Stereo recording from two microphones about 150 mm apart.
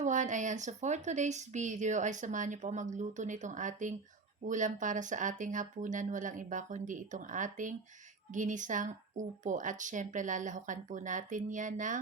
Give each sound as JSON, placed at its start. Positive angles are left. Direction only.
{"t": 0.0, "sound": "speech", "side_deg": -55}